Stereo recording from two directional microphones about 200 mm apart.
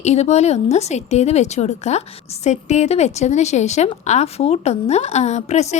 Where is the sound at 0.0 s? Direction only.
35° left (ahead or behind).